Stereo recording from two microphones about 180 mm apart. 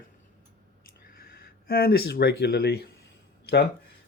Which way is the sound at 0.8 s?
55° left (ahead or behind).